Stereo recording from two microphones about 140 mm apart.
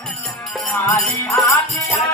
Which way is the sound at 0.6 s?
15° left (ahead or behind).